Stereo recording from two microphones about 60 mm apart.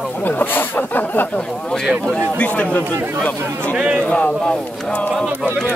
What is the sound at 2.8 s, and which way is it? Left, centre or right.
Speech, right.